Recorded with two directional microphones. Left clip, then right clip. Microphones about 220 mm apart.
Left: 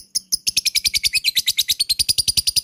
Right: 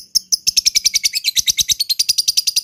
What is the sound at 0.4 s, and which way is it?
Bird, 15° left (ahead or behind).